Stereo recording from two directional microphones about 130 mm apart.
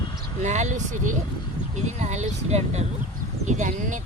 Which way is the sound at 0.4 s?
65° right (ahead or behind).